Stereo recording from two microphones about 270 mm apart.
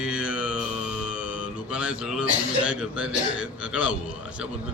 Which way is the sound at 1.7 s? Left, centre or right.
Centre.